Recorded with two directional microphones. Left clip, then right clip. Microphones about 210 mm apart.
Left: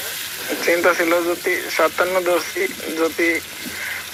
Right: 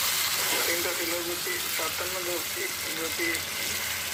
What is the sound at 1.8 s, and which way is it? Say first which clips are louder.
Speech: left 18 dB; 50° left (ahead or behind).